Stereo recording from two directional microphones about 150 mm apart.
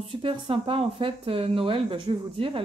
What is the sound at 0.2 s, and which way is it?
Speech, 35° right (ahead or behind).